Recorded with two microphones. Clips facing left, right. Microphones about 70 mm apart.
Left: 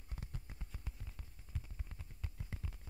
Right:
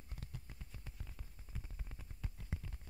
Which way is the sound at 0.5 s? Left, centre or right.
Centre.